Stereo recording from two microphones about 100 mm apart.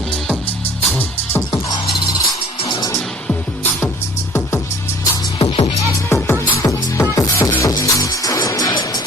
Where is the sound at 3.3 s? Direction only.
15° left (ahead or behind).